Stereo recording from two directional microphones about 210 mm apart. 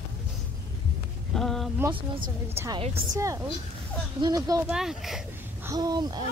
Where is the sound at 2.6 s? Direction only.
10° right (ahead or behind).